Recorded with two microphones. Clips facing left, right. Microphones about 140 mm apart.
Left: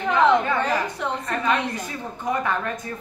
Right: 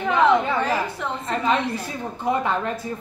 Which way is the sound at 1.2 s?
25° right (ahead or behind).